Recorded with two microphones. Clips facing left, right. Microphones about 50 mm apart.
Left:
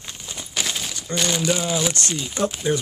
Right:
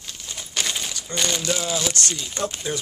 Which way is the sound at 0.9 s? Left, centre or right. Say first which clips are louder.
Left 4 dB; centre.